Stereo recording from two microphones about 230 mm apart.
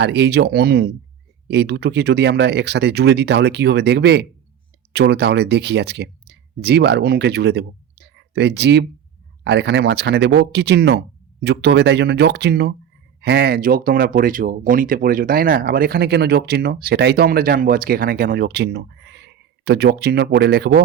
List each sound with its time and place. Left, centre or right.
0.0 s speech: right